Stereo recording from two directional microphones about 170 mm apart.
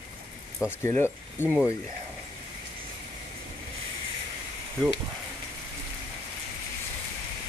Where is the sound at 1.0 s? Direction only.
10° right (ahead or behind).